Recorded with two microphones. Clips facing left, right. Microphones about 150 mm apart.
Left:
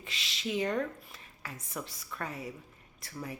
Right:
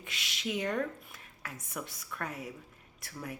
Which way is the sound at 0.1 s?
Centre (ahead or behind).